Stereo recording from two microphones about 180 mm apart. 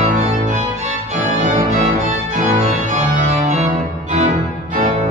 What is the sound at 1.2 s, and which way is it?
Music, 45° right (ahead or behind).